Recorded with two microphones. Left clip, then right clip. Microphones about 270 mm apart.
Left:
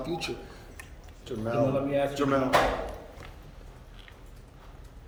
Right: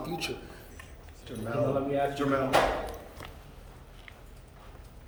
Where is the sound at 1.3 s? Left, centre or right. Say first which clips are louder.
Left 2 dB; left.